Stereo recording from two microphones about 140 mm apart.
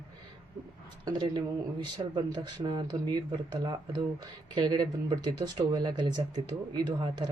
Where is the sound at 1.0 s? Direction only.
30° right (ahead or behind).